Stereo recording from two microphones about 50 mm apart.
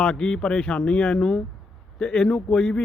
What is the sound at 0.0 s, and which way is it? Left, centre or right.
Speech, centre.